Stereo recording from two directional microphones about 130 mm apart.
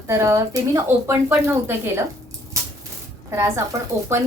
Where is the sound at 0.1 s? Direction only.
20° right (ahead or behind).